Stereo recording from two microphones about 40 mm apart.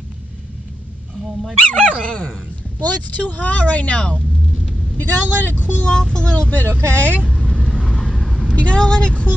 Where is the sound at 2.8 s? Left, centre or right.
Left.